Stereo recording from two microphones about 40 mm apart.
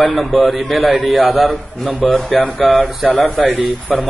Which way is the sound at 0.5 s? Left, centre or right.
Centre.